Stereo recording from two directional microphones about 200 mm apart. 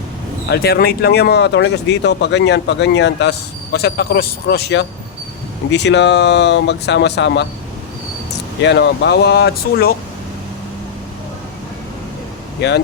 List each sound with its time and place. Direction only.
0.5 s speech: 50° left (ahead or behind)
8.6 s speech: 60° left (ahead or behind)